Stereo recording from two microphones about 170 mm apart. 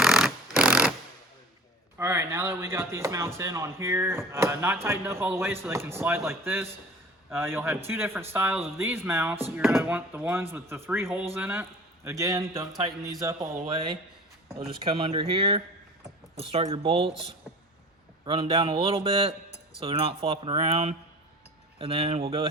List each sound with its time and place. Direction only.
0.0 s a sound: 5° right (ahead or behind)
2.0 s speech: 15° right (ahead or behind); by 17.2 s 35° right (ahead or behind)
18.3 s speech: 35° right (ahead or behind)